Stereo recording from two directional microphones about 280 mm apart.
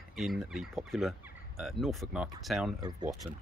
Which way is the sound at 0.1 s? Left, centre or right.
Centre.